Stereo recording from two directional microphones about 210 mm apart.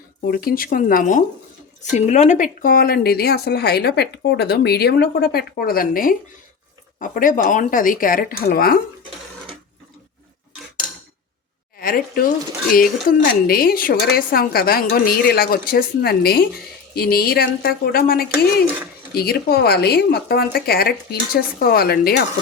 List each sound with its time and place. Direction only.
0.3 s speech: 45° left (ahead or behind)
11.8 s a sound: 45° left (ahead or behind)
12.7 s speech: 45° left (ahead or behind)